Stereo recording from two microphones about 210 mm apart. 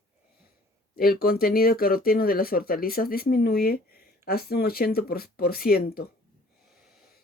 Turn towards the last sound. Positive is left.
turn(degrees=45)  # may be behind; listen again after turning